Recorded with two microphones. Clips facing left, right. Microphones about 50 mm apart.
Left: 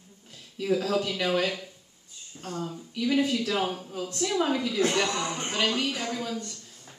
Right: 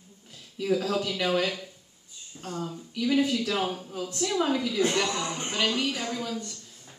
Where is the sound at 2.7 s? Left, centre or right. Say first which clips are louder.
Right 1 dB; centre.